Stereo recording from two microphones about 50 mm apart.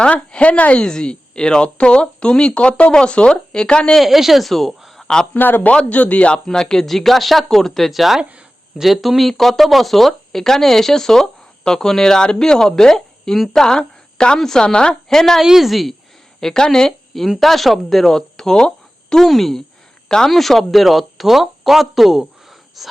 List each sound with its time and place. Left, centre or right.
0.0 s a woman's voice: left
4.0 s speech: centre
4.9 s a sound: centre
5.3 s speech: left
5.9 s a woman's voice: left
6.4 s speech: centre
8.2 s speech: right
8.8 s a woman's voice: centre
15.4 s speech: centre
16.4 s speech: centre
17.2 s speech: centre
20.1 s a woman's voice: centre
20.3 s speech: centre